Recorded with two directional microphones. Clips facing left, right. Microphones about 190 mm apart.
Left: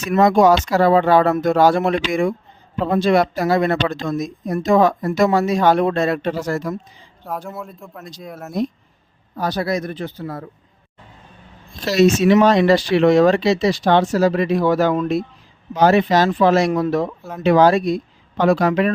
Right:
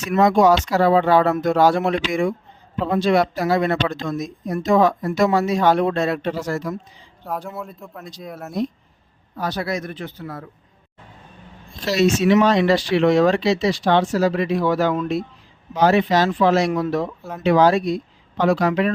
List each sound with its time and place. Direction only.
0.1 s speech: 45° left (ahead or behind)
7.3 s speech: centre (ahead or behind)
9.3 s speech: 40° left (ahead or behind)
11.9 s speech: 45° left (ahead or behind)